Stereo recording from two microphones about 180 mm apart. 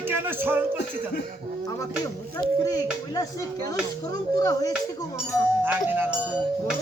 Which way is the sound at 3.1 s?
20° left (ahead or behind).